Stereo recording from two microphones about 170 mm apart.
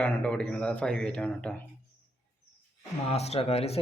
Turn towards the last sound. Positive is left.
turn(degrees=35)  # may be behind; listen again after turning